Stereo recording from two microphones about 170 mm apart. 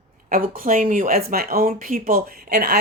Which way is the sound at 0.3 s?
55° right (ahead or behind).